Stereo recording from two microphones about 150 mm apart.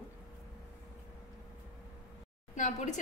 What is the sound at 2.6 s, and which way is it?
Speech, 50° left (ahead or behind).